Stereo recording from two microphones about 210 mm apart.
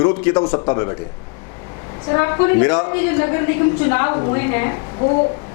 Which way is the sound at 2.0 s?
20° left (ahead or behind).